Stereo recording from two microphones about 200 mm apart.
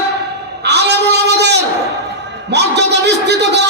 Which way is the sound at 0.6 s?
55° right (ahead or behind).